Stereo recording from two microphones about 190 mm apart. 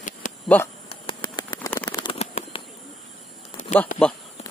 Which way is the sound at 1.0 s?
20° left (ahead or behind).